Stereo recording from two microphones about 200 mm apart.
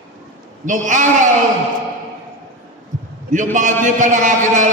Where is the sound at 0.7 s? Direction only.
40° right (ahead or behind).